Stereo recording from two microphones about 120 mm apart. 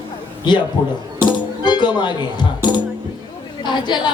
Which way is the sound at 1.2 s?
40° left (ahead or behind).